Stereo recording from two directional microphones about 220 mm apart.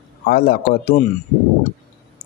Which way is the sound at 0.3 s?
45° left (ahead or behind).